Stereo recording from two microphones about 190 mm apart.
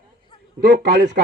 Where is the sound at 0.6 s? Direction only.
65° right (ahead or behind).